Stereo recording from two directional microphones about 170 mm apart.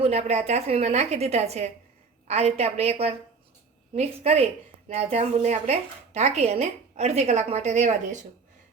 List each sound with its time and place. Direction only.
0.0 s a woman's voice: 40° right (ahead or behind)